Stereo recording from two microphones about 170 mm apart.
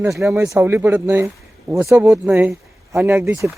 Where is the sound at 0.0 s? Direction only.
15° right (ahead or behind).